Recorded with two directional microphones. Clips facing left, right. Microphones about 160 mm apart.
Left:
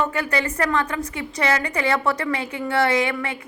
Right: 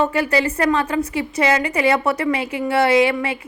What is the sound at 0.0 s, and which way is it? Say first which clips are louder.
A woman's voice: right 5 dB; 25° right (ahead or behind).